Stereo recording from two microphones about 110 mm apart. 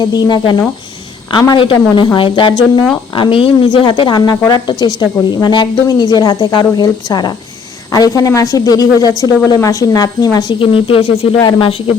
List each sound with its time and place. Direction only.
0.0 s speech: 40° left (ahead or behind)
1.5 s speech: 50° left (ahead or behind); by 10.6 s 35° left (ahead or behind)
10.6 s speech: 55° left (ahead or behind)
11.3 s speech: 40° left (ahead or behind)